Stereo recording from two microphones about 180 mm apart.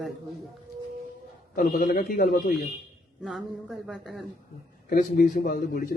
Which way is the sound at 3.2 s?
Centre (ahead or behind).